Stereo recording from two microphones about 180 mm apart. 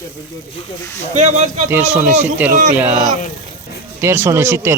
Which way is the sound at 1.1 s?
40° right (ahead or behind).